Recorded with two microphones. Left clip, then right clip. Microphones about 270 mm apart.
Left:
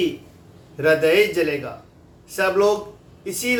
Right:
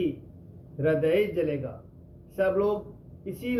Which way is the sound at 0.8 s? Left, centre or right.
Centre.